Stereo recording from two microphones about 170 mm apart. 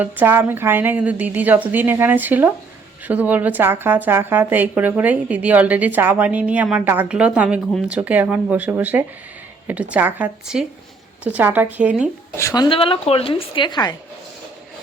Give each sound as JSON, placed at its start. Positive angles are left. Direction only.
{"t": 0.0, "sound": "speech", "side_deg": -10}
{"t": 12.4, "sound": "speech", "side_deg": 20}
{"t": 12.6, "sound": "a woman's voice", "side_deg": 30}